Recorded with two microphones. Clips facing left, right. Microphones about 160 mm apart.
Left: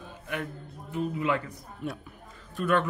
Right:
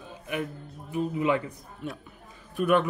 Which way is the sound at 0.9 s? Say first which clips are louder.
Right 3 dB; 20° right (ahead or behind).